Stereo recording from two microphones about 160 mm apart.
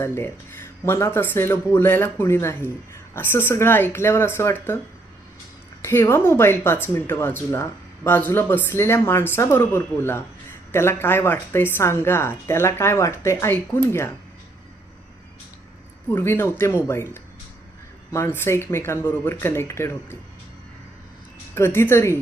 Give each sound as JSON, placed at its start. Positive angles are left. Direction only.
{"t": 0.0, "sound": "speech", "side_deg": 15}
{"t": 5.8, "sound": "speech", "side_deg": 15}
{"t": 16.0, "sound": "speech", "side_deg": 15}
{"t": 18.3, "sound": "speech", "side_deg": 15}
{"t": 21.5, "sound": "speech", "side_deg": 15}